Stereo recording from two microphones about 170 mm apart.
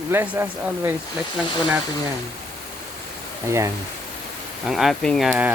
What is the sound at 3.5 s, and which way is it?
Speech, 15° right (ahead or behind).